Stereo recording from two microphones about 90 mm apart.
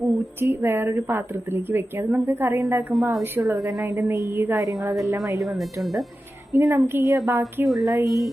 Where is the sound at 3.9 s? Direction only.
25° right (ahead or behind).